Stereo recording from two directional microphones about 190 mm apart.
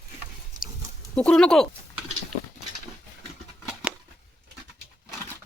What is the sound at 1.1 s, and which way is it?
Speech, 5° left (ahead or behind).